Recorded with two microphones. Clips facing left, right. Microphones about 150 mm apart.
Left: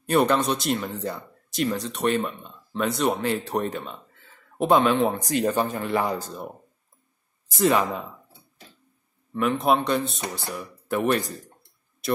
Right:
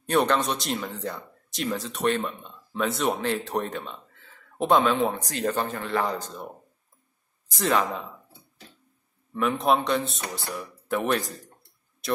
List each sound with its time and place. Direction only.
0.0 s speech: 5° left (ahead or behind)
5.2 s speech: 10° left (ahead or behind)
7.5 s speech: 10° left (ahead or behind)
9.8 s speech: centre (ahead or behind)